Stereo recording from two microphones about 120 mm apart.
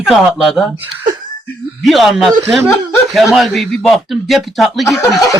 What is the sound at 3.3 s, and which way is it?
Speech, centre (ahead or behind).